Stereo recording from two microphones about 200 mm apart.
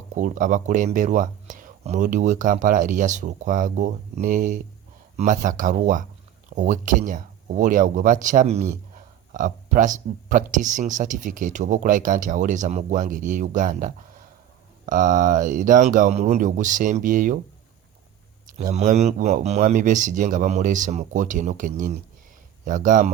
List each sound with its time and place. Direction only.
0.1 s speech: 40° right (ahead or behind)
18.6 s speech: 35° right (ahead or behind)